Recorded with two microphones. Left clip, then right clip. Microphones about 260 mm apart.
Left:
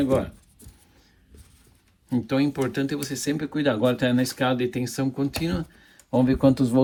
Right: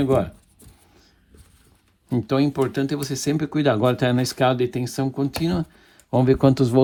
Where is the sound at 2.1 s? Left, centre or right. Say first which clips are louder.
Right 3 dB; centre.